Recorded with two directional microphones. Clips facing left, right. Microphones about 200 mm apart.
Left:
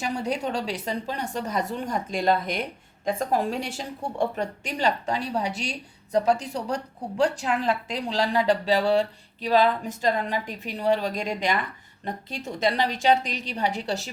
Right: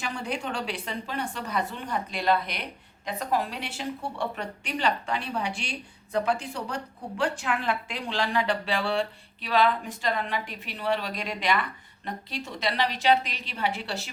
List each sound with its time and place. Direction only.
0.0 s a woman's voice: 40° left (ahead or behind)